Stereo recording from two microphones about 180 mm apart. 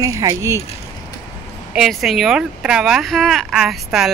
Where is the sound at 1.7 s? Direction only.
Centre (ahead or behind).